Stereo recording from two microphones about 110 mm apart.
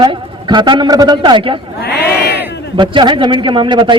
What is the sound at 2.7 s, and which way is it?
A man's voice, 50° right (ahead or behind).